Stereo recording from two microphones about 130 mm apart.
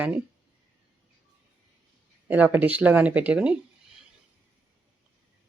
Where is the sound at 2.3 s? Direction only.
15° right (ahead or behind).